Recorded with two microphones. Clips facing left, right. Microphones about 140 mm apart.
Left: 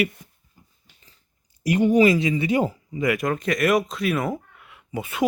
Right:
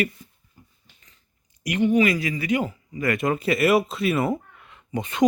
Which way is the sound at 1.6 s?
35° left (ahead or behind).